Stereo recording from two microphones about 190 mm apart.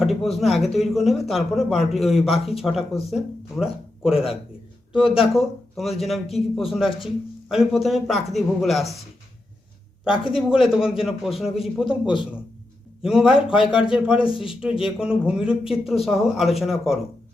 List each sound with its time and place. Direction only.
0.0 s speech: centre (ahead or behind)
10.3 s speech: 5° right (ahead or behind)
14.3 s speech: 30° left (ahead or behind)
14.5 s speech: 5° right (ahead or behind)